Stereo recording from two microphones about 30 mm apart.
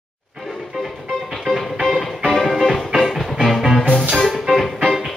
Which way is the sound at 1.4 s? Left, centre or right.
Centre.